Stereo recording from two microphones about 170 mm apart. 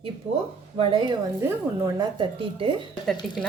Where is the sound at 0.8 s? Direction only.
30° right (ahead or behind).